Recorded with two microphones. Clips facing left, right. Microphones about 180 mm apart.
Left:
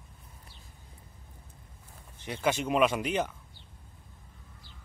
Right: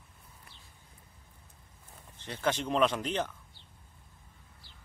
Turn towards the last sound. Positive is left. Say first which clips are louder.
# left 2 dB
turn(degrees=10)  # may be behind; listen again after turning